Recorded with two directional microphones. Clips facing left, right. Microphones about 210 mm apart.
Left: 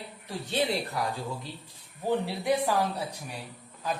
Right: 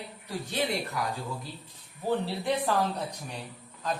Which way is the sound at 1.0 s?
30° left (ahead or behind).